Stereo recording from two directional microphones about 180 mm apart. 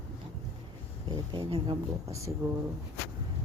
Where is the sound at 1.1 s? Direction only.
25° right (ahead or behind).